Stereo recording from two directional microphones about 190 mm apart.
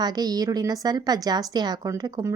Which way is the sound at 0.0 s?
20° right (ahead or behind).